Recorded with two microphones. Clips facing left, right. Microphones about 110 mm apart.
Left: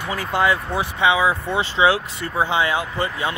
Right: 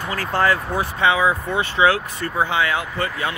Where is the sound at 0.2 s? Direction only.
15° left (ahead or behind).